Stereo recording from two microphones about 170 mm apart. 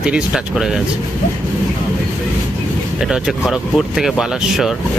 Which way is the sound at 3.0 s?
5° right (ahead or behind).